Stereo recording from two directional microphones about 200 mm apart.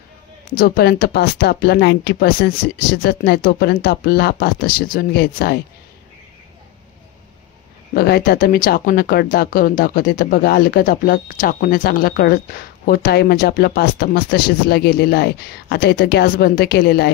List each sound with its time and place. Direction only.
0.6 s speech: 50° left (ahead or behind)
7.9 s speech: 50° left (ahead or behind)